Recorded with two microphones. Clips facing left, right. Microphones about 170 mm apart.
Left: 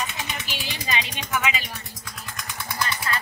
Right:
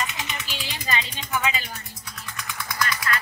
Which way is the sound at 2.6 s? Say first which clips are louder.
Right 1 dB; 30° left (ahead or behind).